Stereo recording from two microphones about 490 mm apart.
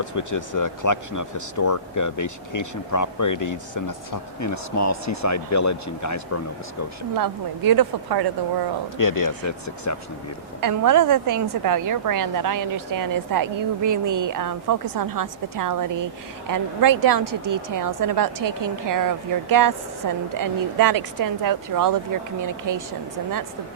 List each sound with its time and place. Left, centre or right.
0.0 s speech: left
7.2 s a woman's voice: right
9.0 s speech: left
10.6 s a woman's voice: right